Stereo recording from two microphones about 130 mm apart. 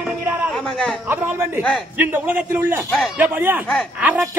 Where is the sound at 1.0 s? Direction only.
15° right (ahead or behind).